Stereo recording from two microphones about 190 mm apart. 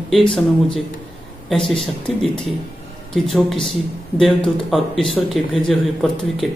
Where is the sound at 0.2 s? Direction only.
25° left (ahead or behind).